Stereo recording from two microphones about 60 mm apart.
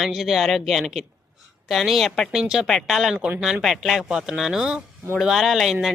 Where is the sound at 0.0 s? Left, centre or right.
Centre.